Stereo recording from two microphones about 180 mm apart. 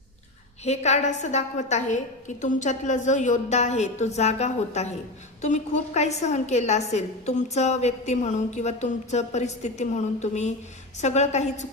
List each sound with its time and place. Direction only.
0.6 s a woman's voice: 40° left (ahead or behind)